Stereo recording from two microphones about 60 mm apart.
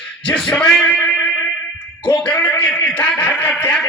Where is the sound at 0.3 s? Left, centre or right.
Left.